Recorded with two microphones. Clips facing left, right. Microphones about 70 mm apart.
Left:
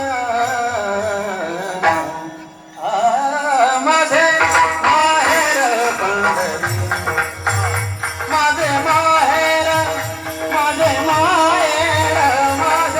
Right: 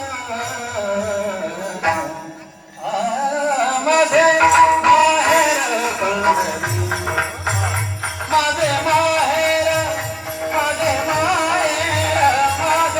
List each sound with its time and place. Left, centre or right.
0.3 s music: left
3.5 s music: left
10.5 s music: left
12.0 s music: left